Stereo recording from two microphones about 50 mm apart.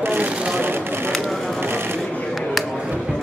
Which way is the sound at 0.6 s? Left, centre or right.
Right.